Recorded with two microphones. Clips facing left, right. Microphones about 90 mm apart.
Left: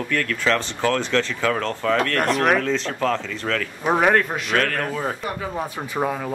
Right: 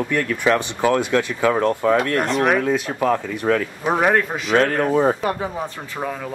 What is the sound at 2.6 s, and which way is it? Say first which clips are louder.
Speech: right 3 dB; 10° right (ahead or behind).